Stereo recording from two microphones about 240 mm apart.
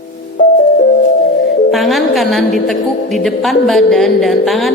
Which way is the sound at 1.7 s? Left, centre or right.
Centre.